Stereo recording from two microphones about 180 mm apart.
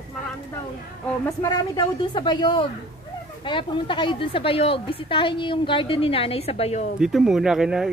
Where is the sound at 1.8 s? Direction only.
25° left (ahead or behind).